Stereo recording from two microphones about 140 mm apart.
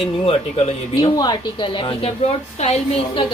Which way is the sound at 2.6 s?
45° left (ahead or behind).